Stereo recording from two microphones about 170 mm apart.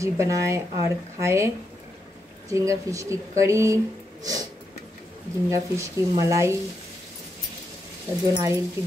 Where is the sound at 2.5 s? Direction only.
20° right (ahead or behind).